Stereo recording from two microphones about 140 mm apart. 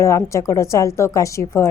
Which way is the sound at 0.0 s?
20° left (ahead or behind).